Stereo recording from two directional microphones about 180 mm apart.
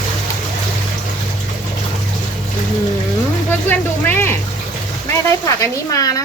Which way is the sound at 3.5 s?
10° left (ahead or behind).